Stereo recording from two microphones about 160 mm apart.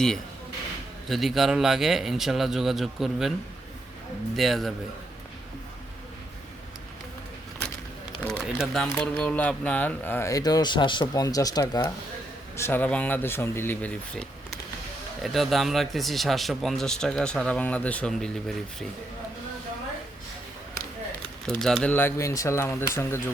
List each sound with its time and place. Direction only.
1.0 s speech: centre (ahead or behind)
4.4 s speech: centre (ahead or behind)
8.2 s a sound: 5° left (ahead or behind)
8.5 s speech: centre (ahead or behind)
15.2 s speech: centre (ahead or behind)
21.6 s speech: 5° left (ahead or behind)